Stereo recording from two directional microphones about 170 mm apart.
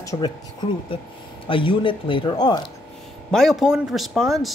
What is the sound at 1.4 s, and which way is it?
Speech, 30° left (ahead or behind).